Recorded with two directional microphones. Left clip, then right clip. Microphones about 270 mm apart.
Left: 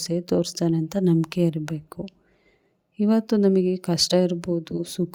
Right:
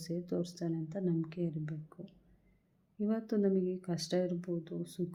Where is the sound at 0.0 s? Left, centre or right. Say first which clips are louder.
Left 14 dB; left.